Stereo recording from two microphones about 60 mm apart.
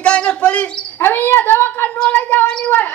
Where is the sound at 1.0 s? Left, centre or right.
Left.